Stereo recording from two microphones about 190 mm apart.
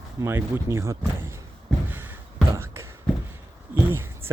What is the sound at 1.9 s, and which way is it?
Beatboxing, 10° right (ahead or behind).